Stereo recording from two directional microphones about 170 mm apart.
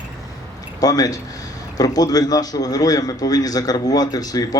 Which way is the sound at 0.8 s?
20° left (ahead or behind).